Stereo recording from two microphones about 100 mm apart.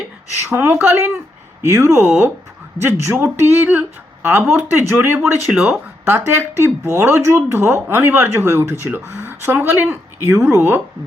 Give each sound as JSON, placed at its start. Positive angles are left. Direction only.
{"t": 0.5, "sound": "speech", "side_deg": -20}
{"t": 5.3, "sound": "speech", "side_deg": -10}
{"t": 6.1, "sound": "speech", "side_deg": -25}